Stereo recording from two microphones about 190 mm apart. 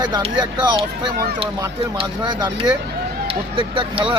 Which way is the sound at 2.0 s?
25° right (ahead or behind).